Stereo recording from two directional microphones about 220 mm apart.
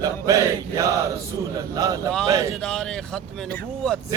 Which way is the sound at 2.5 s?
5° left (ahead or behind).